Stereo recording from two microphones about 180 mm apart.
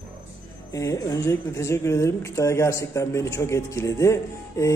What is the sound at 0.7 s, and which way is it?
Speech, 20° left (ahead or behind).